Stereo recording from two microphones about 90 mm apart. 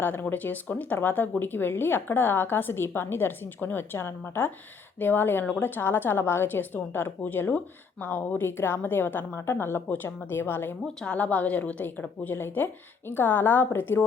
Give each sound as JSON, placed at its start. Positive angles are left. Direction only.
{"t": 0.0, "sound": "a woman's voice", "side_deg": 20}